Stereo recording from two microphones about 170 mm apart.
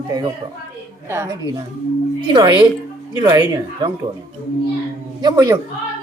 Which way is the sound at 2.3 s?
25° right (ahead or behind).